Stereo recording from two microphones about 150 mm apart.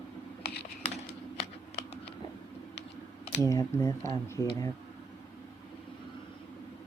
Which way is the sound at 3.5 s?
20° left (ahead or behind).